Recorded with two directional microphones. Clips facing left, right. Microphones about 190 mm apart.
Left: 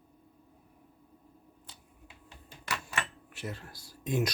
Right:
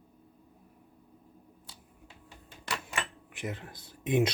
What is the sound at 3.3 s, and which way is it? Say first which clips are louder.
Speech: right 4 dB; 15° right (ahead or behind).